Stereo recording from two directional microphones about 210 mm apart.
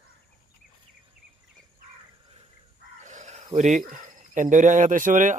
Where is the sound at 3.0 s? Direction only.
35° right (ahead or behind).